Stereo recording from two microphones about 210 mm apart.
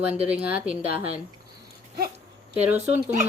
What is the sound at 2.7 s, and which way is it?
Speech, 30° right (ahead or behind).